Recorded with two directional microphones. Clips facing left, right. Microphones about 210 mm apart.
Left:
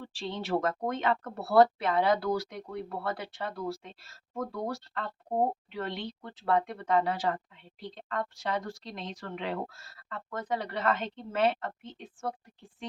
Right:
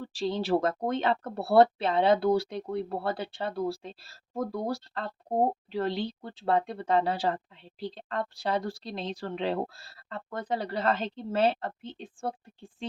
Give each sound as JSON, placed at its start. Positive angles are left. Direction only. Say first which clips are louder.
{"t": 0.0, "sound": "speech", "louder": "right 6 dB", "side_deg": -40}